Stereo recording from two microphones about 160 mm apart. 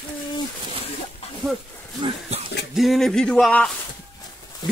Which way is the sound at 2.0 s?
30° right (ahead or behind).